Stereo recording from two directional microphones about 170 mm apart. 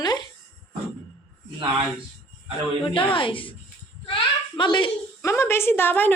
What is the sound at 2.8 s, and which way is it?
A woman's voice, 30° left (ahead or behind).